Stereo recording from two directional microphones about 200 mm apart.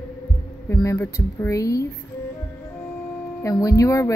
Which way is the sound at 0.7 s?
15° left (ahead or behind).